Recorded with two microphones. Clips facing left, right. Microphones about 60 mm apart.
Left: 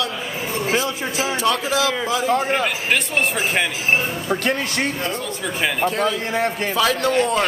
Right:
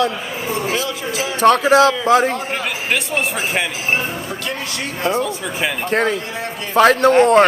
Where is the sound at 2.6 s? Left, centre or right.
Centre.